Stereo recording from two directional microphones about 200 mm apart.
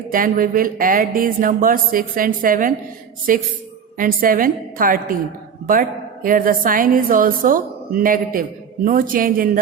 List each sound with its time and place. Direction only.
0.1 s a woman's voice: 45° right (ahead or behind)
6.2 s a woman's voice: 45° right (ahead or behind)